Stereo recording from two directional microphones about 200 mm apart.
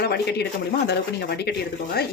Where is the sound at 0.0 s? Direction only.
55° left (ahead or behind).